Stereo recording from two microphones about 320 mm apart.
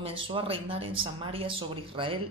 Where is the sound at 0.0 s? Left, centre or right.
Centre.